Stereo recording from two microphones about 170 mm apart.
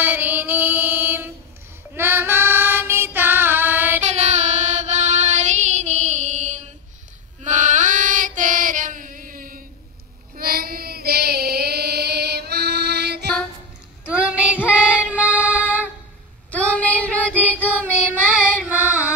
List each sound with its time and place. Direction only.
0.0 s mantra: 10° right (ahead or behind)
2.0 s music: 15° right (ahead or behind)
4.0 s child singing: 40° right (ahead or behind)
7.4 s female singing: 45° right (ahead or behind)
10.3 s child singing: 60° right (ahead or behind)
14.4 s female singing: 10° right (ahead or behind)
16.4 s child singing: 10° left (ahead or behind)
18.6 s carnatic music: 10° right (ahead or behind)